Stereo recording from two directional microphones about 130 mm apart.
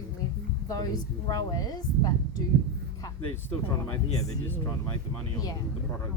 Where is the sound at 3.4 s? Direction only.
15° left (ahead or behind).